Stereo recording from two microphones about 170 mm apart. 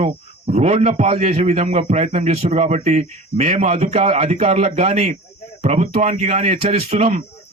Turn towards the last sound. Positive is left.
turn(degrees=-40)  # may be behind; listen again after turning